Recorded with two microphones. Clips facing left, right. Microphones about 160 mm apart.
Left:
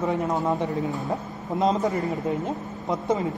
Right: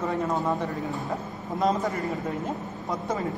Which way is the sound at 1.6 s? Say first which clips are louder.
Left 3 dB; 20° left (ahead or behind).